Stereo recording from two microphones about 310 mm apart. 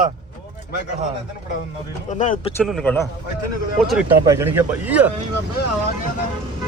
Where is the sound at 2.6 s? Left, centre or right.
Centre.